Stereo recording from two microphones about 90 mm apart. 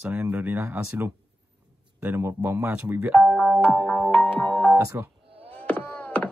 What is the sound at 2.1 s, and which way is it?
Speech, 25° right (ahead or behind).